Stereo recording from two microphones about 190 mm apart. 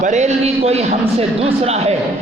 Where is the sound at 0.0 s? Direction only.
40° right (ahead or behind).